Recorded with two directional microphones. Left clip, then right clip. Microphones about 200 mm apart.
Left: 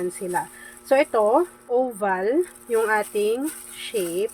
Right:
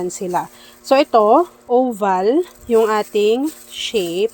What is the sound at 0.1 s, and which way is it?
Speech, 35° right (ahead or behind).